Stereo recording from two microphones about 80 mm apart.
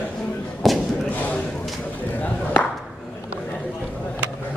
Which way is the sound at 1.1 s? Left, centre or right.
Left.